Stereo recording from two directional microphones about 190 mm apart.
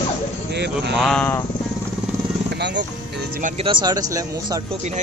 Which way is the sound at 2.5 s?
65° right (ahead or behind).